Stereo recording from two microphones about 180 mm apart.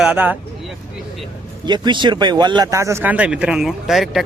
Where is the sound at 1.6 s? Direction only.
25° right (ahead or behind).